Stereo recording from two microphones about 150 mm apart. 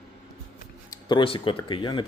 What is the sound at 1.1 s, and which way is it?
Speech, 35° left (ahead or behind).